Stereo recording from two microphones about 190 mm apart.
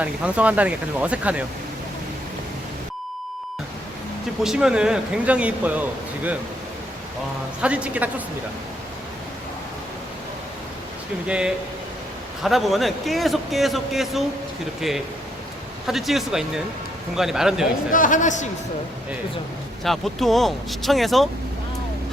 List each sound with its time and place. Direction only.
0.0 s speech: 5° right (ahead or behind)
4.4 s speech: 5° right (ahead or behind)
7.6 s speech: 5° right (ahead or behind)
11.3 s speech: 5° right (ahead or behind)
17.9 s speech: 45° left (ahead or behind)
19.8 s speech: centre (ahead or behind)